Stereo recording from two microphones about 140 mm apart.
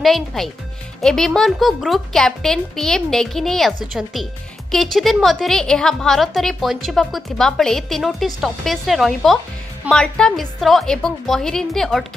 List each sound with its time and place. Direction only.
0.0 s speech: centre (ahead or behind)